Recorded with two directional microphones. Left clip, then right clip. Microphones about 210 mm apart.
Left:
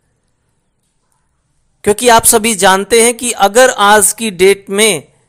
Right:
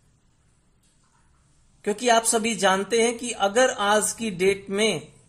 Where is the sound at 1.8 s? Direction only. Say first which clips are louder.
Left 13 dB; 35° left (ahead or behind).